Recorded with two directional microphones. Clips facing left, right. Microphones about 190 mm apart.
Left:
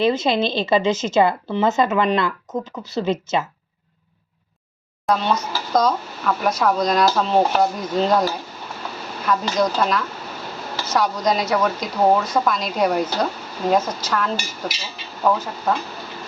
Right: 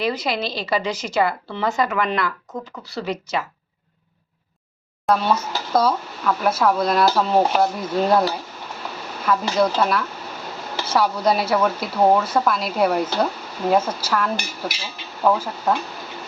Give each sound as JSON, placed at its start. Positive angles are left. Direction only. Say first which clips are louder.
{"t": 0.0, "sound": "speech", "louder": "left 5 dB", "side_deg": 25}
{"t": 5.0, "sound": "speech", "louder": "right 1 dB", "side_deg": -5}